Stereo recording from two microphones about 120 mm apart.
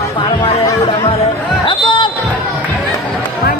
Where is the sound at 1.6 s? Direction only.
40° left (ahead or behind).